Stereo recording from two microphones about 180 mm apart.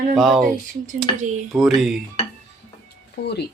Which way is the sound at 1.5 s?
Centre (ahead or behind).